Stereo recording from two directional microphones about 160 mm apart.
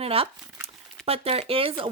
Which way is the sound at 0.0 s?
35° right (ahead or behind).